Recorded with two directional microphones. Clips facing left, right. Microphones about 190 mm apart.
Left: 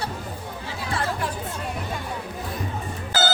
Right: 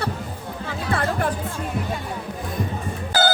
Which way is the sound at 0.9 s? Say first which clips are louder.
Right 4 dB; 55° right (ahead or behind).